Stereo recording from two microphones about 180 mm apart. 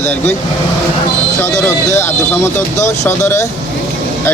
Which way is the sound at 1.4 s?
15° left (ahead or behind).